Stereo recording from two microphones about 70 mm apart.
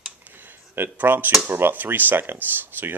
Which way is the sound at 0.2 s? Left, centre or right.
Right.